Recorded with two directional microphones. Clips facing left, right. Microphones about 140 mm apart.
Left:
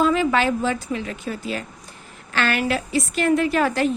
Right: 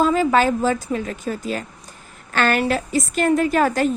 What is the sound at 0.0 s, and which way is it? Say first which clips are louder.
A woman's voice: right 2 dB; 40° right (ahead or behind).